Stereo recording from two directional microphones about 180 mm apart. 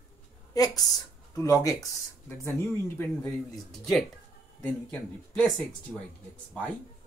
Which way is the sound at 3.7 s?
Centre (ahead or behind).